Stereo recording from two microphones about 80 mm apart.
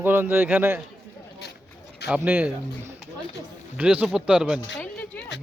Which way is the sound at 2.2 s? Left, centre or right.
Right.